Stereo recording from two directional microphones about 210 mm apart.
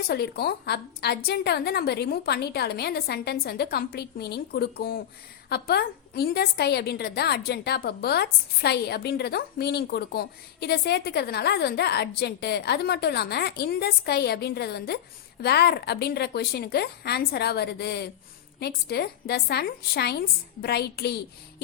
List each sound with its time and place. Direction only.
0.1 s a woman's voice: 50° left (ahead or behind)